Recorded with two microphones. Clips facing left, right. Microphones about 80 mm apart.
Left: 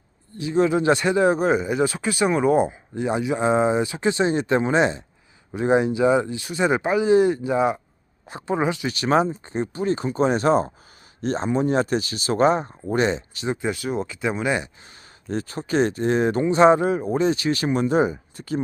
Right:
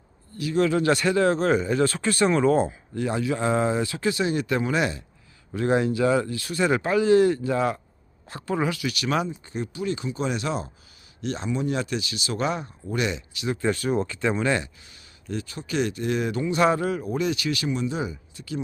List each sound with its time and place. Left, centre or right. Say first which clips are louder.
0.3 s speech: left 2 dB; left
13.7 s speech: right 1 dB; centre
15.3 s speech: left 5 dB; left
17.7 s speech: left 8 dB; left